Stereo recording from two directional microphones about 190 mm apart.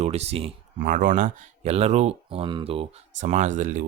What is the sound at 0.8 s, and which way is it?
Speech, 45° right (ahead or behind).